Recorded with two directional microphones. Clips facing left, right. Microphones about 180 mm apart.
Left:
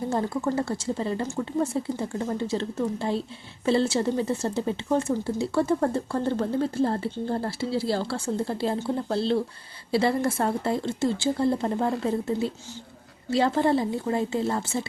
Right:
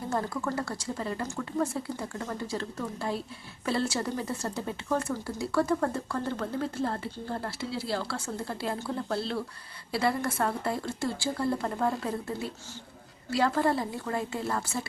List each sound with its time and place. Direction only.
0.1 s a woman's voice: 25° left (ahead or behind)